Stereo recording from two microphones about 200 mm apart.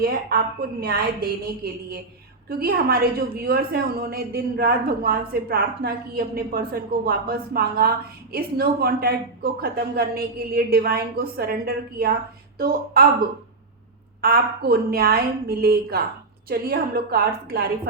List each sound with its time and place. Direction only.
0.0 s a woman's voice: 50° right (ahead or behind)
14.2 s a woman's voice: 50° right (ahead or behind)